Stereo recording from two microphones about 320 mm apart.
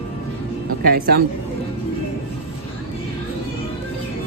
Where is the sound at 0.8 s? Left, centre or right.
Right.